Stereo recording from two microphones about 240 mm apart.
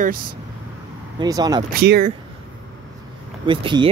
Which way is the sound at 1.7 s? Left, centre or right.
Right.